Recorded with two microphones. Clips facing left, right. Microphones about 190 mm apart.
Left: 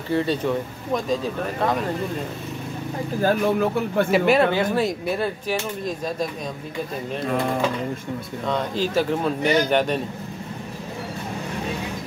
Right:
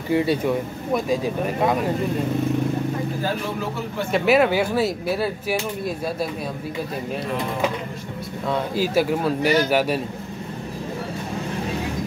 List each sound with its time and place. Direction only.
0.1 s speech: 10° right (ahead or behind)
3.2 s speech: 50° left (ahead or behind)
4.1 s speech: 5° right (ahead or behind)
8.5 s speech: 10° right (ahead or behind)